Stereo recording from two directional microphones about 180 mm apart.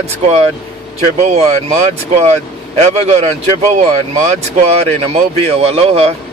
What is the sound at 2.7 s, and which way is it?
Speech, 40° right (ahead or behind).